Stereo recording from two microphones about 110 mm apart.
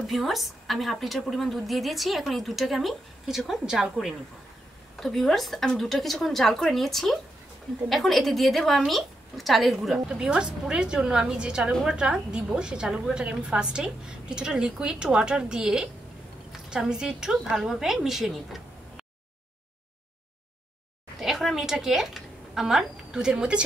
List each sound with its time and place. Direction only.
0.0 s a woman's voice: centre (ahead or behind)
21.2 s speech: centre (ahead or behind)